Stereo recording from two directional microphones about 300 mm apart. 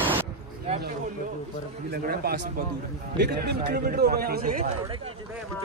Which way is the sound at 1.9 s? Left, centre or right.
Right.